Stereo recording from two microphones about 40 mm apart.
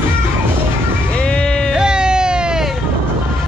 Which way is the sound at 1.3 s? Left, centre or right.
Centre.